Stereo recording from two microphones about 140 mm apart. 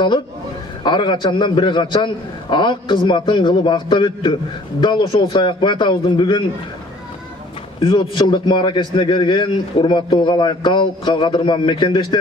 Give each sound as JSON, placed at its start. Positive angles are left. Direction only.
{"t": 0.8, "sound": "a man's voice", "side_deg": 35}
{"t": 7.8, "sound": "a man's voice", "side_deg": 35}